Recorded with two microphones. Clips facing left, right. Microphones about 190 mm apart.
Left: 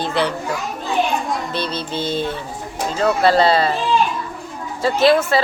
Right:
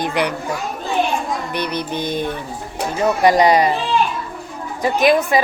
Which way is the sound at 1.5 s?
15° right (ahead or behind).